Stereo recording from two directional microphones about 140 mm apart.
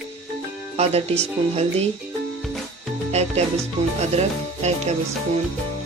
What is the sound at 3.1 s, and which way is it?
Music, 50° right (ahead or behind).